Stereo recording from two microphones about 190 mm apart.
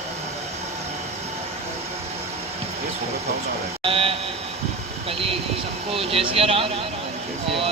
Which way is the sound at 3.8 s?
30° right (ahead or behind).